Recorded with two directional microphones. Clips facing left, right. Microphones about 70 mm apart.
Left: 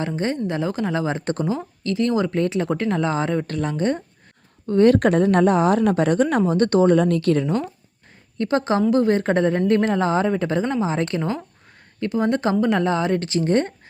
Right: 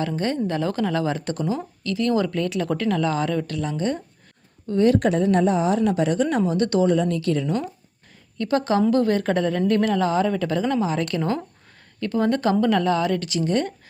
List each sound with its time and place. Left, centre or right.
0.4 s speech: centre
3.5 s speech: left
8.4 s speech: left
11.2 s speech: centre; by 13.7 s left